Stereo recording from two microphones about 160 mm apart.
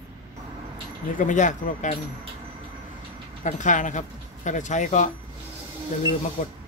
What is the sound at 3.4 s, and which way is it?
Speech, 50° left (ahead or behind).